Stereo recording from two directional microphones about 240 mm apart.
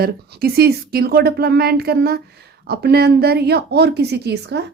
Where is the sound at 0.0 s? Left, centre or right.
Right.